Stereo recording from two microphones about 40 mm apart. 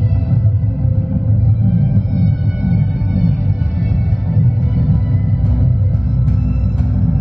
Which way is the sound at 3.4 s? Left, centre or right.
Centre.